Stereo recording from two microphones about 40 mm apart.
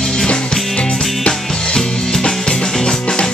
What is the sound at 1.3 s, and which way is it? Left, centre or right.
Music, centre.